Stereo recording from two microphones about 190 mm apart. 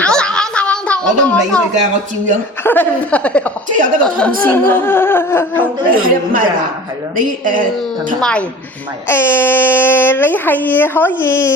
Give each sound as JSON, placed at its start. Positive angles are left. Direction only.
{"t": 0.0, "sound": "a sound", "side_deg": 5}
{"t": 1.8, "sound": "speech", "side_deg": -40}
{"t": 2.6, "sound": "a child's voice", "side_deg": 10}
{"t": 3.7, "sound": "a man's voice", "side_deg": -45}
{"t": 4.4, "sound": "a child's voice", "side_deg": 10}
{"t": 6.0, "sound": "a man's voice", "side_deg": -50}
{"t": 8.2, "sound": "a woman's voice", "side_deg": 5}